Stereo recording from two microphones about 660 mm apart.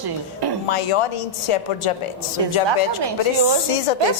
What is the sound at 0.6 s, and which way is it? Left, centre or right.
A woman's voice, left.